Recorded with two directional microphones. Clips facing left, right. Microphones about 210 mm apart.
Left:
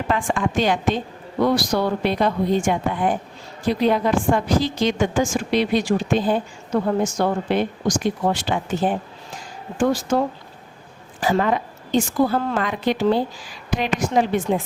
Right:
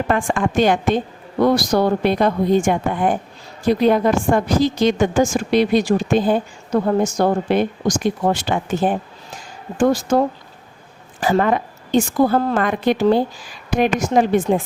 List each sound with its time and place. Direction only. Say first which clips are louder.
0.1 s a woman's voice: right 1 dB; 50° right (ahead or behind)